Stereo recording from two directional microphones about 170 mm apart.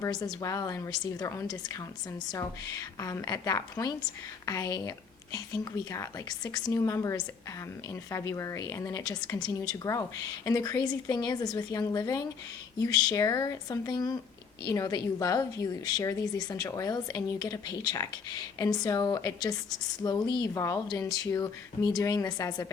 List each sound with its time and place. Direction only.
0.0 s a woman's voice: 20° left (ahead or behind)